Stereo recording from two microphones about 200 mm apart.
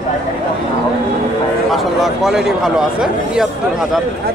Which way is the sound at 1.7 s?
Centre (ahead or behind).